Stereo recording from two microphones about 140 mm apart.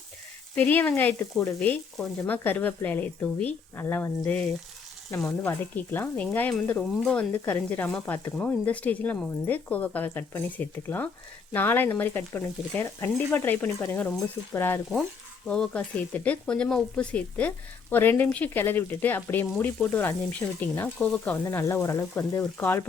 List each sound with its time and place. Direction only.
0.5 s speech: 10° left (ahead or behind)
1.5 s speech: 10° left (ahead or behind)
5.5 s speech: 15° left (ahead or behind)
15.4 s speech: 5° left (ahead or behind)